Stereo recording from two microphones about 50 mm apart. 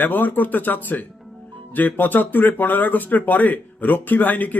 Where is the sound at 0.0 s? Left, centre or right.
Left.